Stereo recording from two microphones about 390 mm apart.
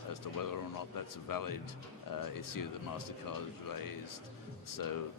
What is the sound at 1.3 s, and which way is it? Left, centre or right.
A man's voice, left.